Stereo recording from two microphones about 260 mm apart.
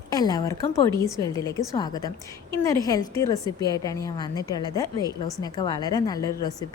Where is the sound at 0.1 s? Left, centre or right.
Centre.